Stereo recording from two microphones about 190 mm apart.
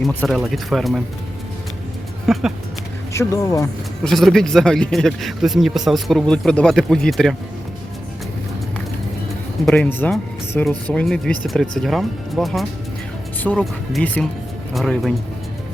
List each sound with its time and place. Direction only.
0.0 s speech: centre (ahead or behind)
2.2 s speech: centre (ahead or behind)
3.1 s speech: 15° left (ahead or behind)
4.0 s speech: centre (ahead or behind)
9.6 s speech: 10° left (ahead or behind)